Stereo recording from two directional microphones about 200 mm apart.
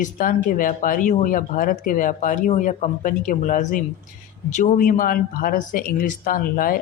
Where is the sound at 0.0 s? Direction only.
40° left (ahead or behind).